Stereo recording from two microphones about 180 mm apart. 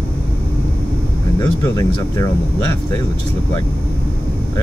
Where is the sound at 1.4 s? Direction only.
20° left (ahead or behind).